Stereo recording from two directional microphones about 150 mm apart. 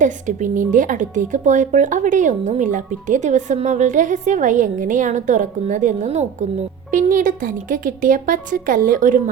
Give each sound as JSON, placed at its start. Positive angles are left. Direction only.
{"t": 0.0, "sound": "a woman's voice", "side_deg": -55}